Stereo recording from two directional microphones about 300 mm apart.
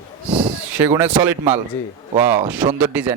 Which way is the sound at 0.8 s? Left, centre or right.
Centre.